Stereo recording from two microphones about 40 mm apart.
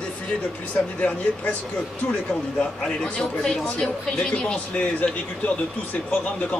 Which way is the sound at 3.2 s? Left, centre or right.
Centre.